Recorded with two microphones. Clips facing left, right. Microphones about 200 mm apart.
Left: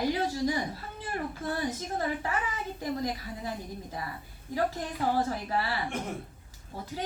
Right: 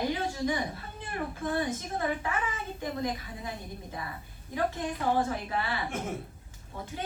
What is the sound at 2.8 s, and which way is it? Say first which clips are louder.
Speech: even; 35° left (ahead or behind).